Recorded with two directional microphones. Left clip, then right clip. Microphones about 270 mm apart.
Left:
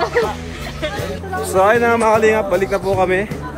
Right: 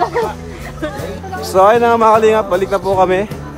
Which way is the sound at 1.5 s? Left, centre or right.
Centre.